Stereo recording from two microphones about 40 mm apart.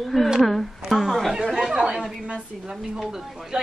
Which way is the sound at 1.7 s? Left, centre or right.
Centre.